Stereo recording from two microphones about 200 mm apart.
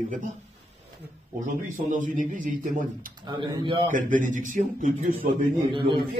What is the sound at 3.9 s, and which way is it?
A man's voice, 40° right (ahead or behind).